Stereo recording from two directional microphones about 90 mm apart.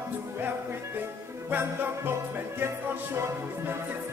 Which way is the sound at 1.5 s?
25° right (ahead or behind).